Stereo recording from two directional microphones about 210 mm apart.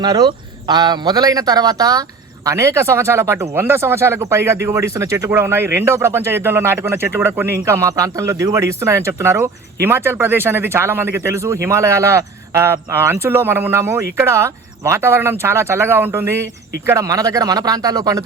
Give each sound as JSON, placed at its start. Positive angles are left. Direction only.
{"t": 0.0, "sound": "speech", "side_deg": -20}